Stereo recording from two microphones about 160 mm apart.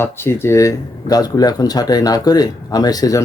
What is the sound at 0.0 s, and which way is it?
Speech, 15° left (ahead or behind).